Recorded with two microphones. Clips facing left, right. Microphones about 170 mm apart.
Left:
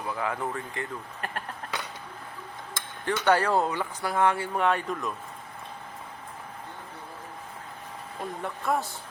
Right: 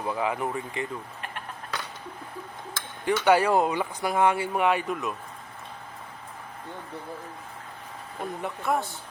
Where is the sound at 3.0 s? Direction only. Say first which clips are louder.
Right 3 dB; 10° right (ahead or behind).